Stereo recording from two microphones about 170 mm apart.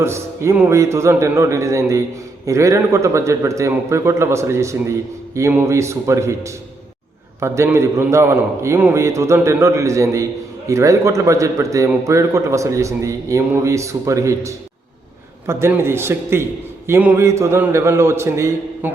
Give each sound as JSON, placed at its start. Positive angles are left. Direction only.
{"t": 0.0, "sound": "a man's voice", "side_deg": -15}